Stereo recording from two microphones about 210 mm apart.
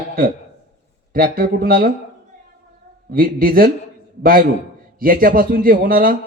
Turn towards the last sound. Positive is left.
turn(degrees=-45)  # may be behind; listen again after turning